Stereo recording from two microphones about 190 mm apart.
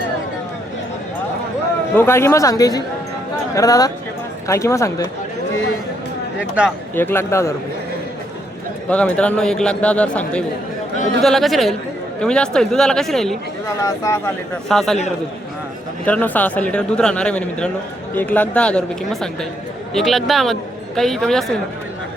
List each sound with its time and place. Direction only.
2.0 s a man's voice: 15° left (ahead or behind)
6.9 s a man's voice: 10° left (ahead or behind)
8.9 s a man's voice: 5° left (ahead or behind)
13.8 s a man's voice: 15° left (ahead or behind)
14.7 s speech: centre (ahead or behind)
16.0 s a man's voice: 10° left (ahead or behind)